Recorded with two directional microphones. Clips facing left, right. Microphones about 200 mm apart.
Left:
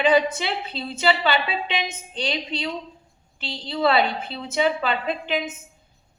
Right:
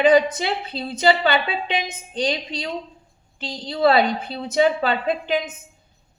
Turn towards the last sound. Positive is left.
turn(degrees=-35)  # may be behind; listen again after turning